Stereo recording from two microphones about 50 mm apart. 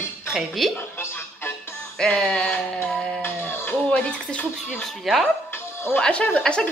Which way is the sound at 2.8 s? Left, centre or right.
Centre.